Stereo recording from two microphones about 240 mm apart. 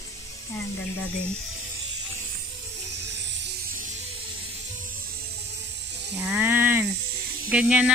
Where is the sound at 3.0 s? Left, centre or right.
Right.